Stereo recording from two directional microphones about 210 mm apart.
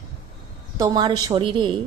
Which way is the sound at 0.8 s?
20° right (ahead or behind).